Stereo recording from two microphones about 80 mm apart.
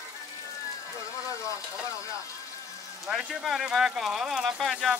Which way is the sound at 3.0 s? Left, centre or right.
Centre.